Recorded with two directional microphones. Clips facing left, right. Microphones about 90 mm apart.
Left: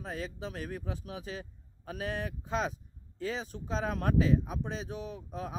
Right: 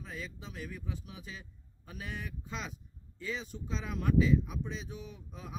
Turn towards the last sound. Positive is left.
turn(degrees=45)  # may be behind; listen again after turning